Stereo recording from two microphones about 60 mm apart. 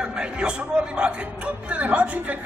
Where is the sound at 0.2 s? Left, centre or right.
Centre.